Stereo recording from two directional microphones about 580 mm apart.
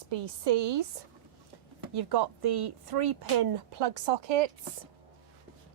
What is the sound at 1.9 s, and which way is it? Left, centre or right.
Speech, right.